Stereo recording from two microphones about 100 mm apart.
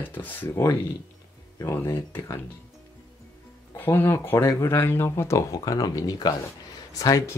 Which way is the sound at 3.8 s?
25° left (ahead or behind).